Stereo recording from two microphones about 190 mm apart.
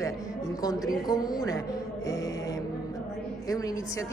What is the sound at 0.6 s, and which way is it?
A woman's voice, 20° left (ahead or behind).